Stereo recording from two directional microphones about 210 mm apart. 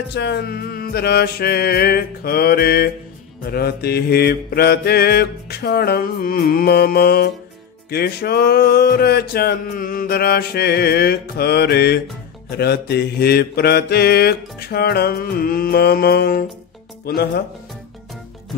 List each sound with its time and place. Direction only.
0.1 s music: 50° left (ahead or behind)